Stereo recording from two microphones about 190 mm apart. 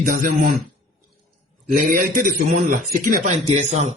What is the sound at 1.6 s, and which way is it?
A man's voice, 45° right (ahead or behind).